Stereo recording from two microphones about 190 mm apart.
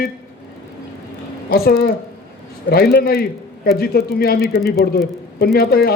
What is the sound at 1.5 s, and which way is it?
A man's voice, 55° left (ahead or behind).